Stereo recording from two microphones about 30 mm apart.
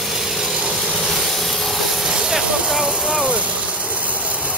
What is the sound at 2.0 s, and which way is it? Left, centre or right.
Vehicle, centre.